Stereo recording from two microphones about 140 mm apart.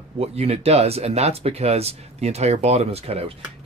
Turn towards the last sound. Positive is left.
turn(degrees=-50)  # may be behind; listen again after turning